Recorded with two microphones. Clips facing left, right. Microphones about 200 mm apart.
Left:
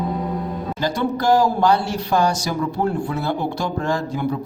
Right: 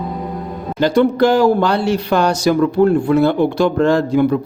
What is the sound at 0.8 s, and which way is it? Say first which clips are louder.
Speech: right 10 dB; 65° right (ahead or behind).